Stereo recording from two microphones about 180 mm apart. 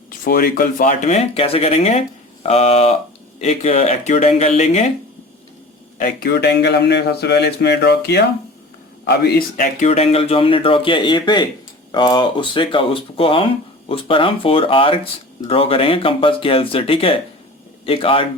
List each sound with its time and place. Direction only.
0.3 s speech: 55° left (ahead or behind); by 4.9 s 40° left (ahead or behind)
6.0 s a man's voice: 55° left (ahead or behind)
9.8 s speech: 35° left (ahead or behind)